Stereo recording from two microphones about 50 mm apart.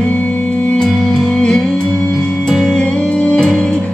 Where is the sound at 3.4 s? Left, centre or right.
Centre.